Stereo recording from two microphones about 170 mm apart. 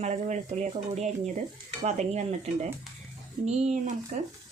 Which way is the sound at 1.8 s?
45° right (ahead or behind).